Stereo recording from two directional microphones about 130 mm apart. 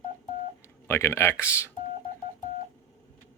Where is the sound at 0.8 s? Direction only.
20° left (ahead or behind).